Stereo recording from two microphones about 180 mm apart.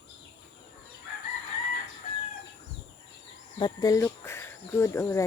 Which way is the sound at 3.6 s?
20° left (ahead or behind).